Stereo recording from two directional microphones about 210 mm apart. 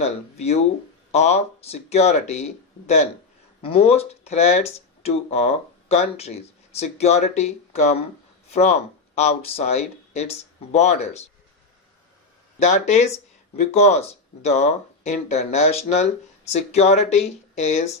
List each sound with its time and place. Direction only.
0.0 s speech: 30° left (ahead or behind)
12.5 s speech: 35° left (ahead or behind)